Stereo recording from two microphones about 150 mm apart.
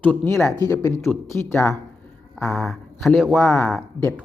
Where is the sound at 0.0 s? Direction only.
15° left (ahead or behind).